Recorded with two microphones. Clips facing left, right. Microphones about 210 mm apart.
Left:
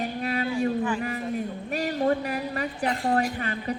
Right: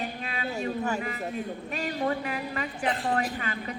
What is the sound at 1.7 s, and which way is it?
A woman's voice, 40° left (ahead or behind).